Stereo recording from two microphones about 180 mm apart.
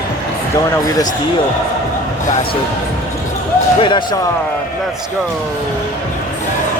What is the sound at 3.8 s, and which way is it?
Speech, 25° left (ahead or behind).